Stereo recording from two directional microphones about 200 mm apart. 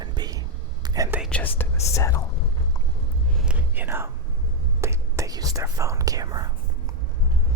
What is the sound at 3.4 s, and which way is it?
Whispering, 5° right (ahead or behind).